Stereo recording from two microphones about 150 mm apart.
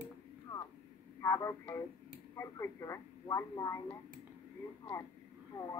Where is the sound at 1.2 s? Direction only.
20° left (ahead or behind).